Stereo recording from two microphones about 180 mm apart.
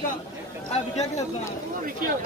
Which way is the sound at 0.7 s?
35° left (ahead or behind).